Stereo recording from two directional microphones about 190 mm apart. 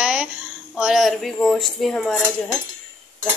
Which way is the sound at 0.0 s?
5° right (ahead or behind).